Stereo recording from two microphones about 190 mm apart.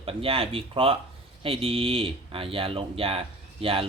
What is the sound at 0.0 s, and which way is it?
Speech, 30° right (ahead or behind).